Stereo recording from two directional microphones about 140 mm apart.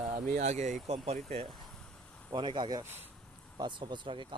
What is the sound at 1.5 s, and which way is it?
Vehicle, 5° left (ahead or behind).